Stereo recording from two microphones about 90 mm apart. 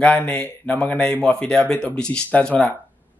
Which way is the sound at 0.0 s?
15° left (ahead or behind).